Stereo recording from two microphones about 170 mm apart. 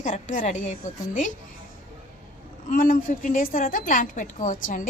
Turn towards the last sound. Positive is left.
turn(degrees=50)  # may be behind; listen again after turning